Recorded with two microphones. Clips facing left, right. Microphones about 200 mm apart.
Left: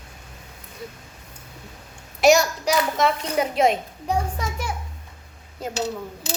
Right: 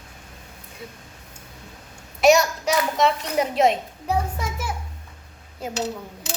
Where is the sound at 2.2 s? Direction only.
Centre (ahead or behind).